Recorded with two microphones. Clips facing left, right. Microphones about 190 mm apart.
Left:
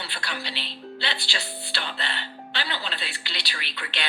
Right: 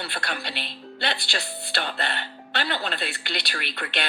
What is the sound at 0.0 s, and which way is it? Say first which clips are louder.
Speech: right 3 dB; 50° right (ahead or behind).